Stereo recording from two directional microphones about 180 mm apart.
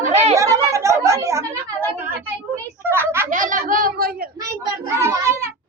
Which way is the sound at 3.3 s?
45° right (ahead or behind).